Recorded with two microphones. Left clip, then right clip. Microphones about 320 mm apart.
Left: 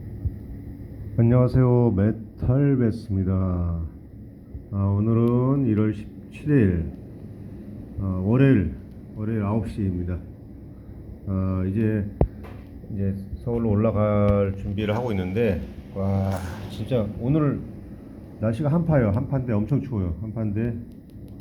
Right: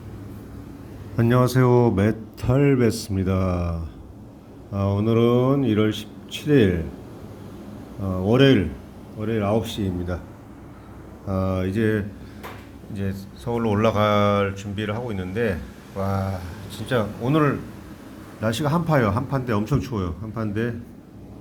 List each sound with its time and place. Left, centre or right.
1.1 s speech: right
8.0 s speech: right
11.3 s speech: right
14.5 s speech: centre
17.0 s speech: right
18.6 s speech: right